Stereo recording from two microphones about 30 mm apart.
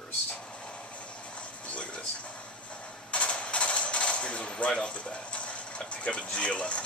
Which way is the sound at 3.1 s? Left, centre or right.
Left.